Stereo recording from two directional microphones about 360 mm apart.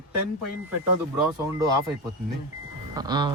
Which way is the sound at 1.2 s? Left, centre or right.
Centre.